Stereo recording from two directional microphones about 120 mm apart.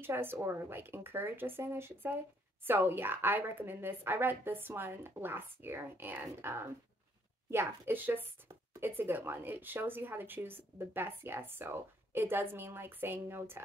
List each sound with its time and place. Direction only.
0.0 s a woman's voice: 20° right (ahead or behind)